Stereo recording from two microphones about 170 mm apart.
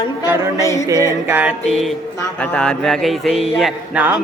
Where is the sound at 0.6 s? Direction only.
20° left (ahead or behind).